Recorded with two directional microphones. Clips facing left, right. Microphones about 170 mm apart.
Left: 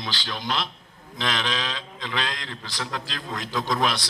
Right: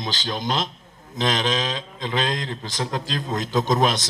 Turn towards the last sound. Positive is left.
turn(degrees=-20)  # may be behind; listen again after turning